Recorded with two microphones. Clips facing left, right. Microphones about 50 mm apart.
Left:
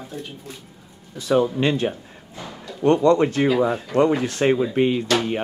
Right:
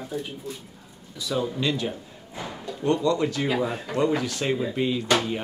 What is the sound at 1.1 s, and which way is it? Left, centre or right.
Speech, left.